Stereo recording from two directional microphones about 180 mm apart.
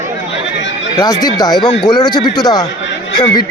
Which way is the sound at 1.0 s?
20° left (ahead or behind).